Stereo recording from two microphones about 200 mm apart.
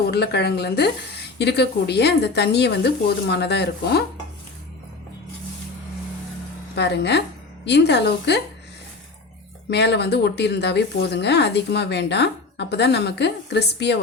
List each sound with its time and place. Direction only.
0.1 s speech: 55° left (ahead or behind)
6.7 s a woman's voice: 55° left (ahead or behind)
9.6 s speech: 55° left (ahead or behind)